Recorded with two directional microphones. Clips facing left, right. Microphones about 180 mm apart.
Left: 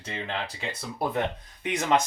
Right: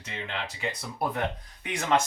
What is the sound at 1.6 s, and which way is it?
Speech, 20° left (ahead or behind).